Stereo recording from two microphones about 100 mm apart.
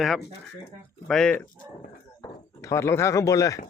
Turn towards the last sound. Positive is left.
turn(degrees=35)  # may be behind; listen again after turning